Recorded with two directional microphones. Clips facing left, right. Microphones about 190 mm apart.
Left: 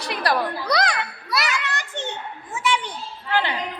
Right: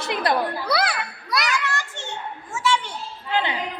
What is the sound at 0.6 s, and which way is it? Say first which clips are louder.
Speech: left 1 dB; 5° right (ahead or behind).